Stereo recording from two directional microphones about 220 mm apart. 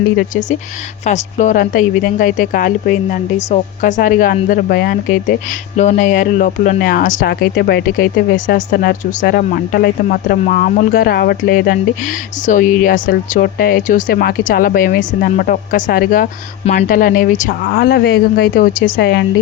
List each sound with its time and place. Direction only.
0.2 s speech: 35° left (ahead or behind)